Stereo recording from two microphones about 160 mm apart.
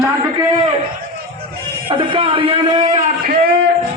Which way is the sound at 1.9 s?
30° right (ahead or behind).